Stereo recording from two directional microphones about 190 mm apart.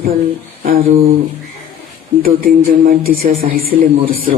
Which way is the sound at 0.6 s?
50° right (ahead or behind).